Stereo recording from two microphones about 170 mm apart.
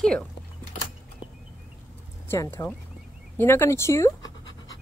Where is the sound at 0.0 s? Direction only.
5° left (ahead or behind).